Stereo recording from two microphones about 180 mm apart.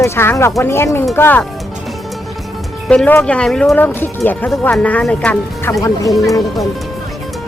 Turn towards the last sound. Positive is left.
turn(degrees=20)  # may be behind; listen again after turning